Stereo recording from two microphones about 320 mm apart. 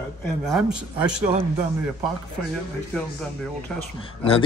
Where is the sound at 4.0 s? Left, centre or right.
Centre.